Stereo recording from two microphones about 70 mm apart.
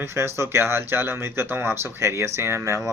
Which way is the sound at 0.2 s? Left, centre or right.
Right.